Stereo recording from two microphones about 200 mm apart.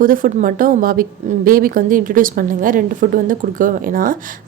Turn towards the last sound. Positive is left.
turn(degrees=-45)  # may be behind; listen again after turning